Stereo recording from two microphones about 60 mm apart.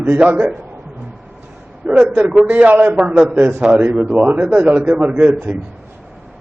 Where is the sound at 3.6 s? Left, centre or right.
Centre.